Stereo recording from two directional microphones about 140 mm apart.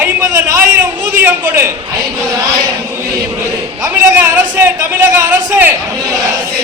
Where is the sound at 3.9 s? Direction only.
15° right (ahead or behind).